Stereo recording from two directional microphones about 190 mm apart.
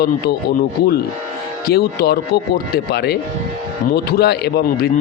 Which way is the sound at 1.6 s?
55° left (ahead or behind).